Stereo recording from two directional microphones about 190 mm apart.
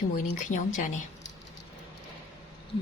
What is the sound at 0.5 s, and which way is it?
Speech, 40° left (ahead or behind).